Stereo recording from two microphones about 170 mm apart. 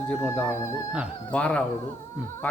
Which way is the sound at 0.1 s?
10° left (ahead or behind).